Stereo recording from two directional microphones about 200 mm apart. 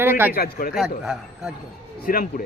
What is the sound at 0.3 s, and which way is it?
Speech, 50° left (ahead or behind).